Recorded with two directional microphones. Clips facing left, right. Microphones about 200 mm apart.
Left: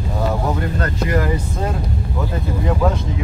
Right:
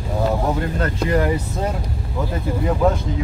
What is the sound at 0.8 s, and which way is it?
Speech, 25° right (ahead or behind).